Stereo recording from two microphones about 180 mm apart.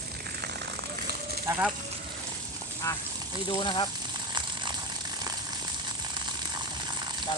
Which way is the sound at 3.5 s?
25° left (ahead or behind).